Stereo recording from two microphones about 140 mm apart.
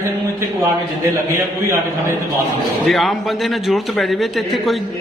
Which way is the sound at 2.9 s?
Centre (ahead or behind).